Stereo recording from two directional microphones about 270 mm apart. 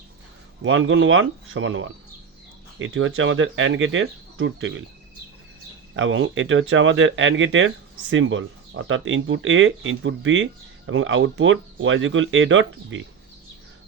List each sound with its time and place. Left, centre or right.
0.6 s speech: right
6.0 s speech: right